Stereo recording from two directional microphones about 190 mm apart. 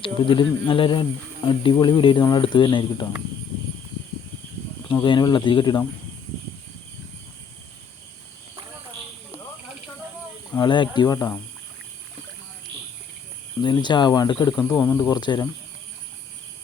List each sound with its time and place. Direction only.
0.0 s speech: 25° left (ahead or behind)
5.0 s speech: 25° left (ahead or behind)
10.5 s speech: 25° left (ahead or behind)
13.6 s speech: 25° left (ahead or behind)